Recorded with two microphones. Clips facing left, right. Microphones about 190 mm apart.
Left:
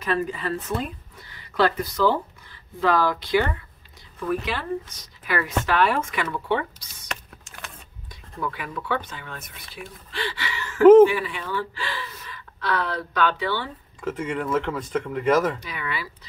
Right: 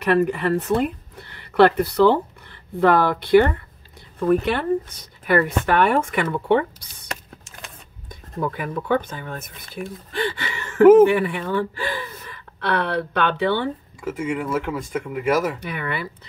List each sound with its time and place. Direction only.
0.0 s speech: 65° right (ahead or behind)
8.1 s speech: 45° right (ahead or behind)
14.0 s speech: 10° right (ahead or behind)
15.6 s speech: 55° right (ahead or behind)